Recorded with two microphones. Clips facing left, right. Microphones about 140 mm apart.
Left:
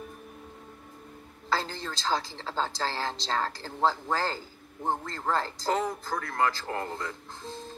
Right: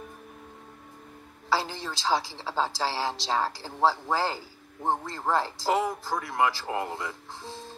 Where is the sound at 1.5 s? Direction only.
10° right (ahead or behind).